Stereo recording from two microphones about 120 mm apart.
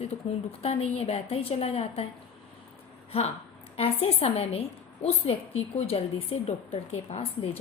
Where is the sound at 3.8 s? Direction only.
55° left (ahead or behind).